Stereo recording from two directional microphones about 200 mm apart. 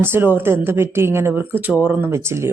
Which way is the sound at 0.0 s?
10° right (ahead or behind).